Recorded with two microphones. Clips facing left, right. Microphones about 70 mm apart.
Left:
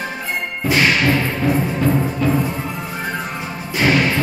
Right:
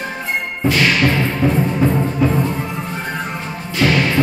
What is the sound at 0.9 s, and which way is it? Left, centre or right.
Music, centre.